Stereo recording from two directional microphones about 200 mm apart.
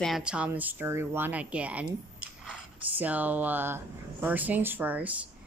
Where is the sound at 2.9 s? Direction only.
10° right (ahead or behind).